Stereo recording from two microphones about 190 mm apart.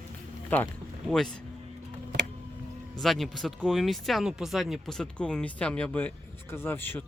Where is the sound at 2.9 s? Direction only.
Centre (ahead or behind).